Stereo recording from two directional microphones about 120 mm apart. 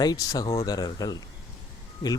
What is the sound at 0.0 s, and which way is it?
Speech, 30° left (ahead or behind).